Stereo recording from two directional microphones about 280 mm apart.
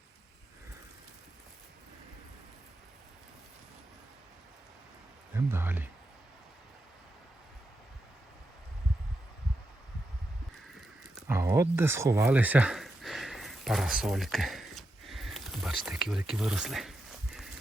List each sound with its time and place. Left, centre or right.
5.5 s speech: centre
11.3 s speech: centre